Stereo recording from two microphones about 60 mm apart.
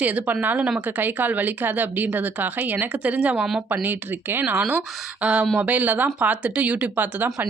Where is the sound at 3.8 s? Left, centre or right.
Right.